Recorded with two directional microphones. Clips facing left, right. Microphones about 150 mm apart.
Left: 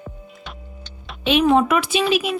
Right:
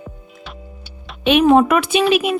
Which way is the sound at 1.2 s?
60° right (ahead or behind).